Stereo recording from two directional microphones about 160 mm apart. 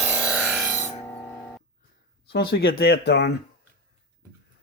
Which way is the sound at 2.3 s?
80° left.